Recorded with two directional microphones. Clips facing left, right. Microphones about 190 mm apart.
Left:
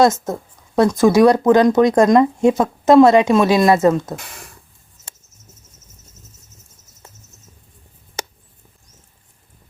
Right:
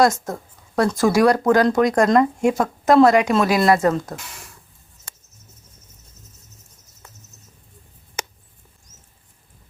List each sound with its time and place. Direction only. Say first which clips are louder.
0.0 s speech: left 3 dB; 20° left (ahead or behind)
4.1 s speech: left 4 dB; 55° left (ahead or behind)